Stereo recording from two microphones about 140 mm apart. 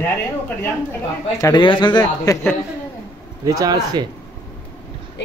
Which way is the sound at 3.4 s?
25° right (ahead or behind).